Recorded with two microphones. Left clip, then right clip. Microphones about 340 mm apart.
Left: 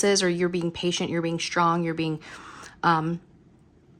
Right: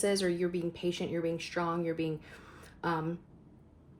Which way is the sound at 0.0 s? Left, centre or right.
Left.